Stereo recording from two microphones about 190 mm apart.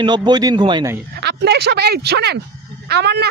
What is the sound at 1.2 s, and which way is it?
Speech, 60° right (ahead or behind).